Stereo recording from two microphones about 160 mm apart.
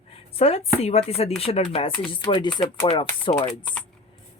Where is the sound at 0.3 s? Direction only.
40° left (ahead or behind).